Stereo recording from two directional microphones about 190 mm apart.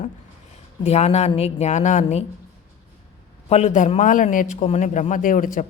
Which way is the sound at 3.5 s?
40° left (ahead or behind).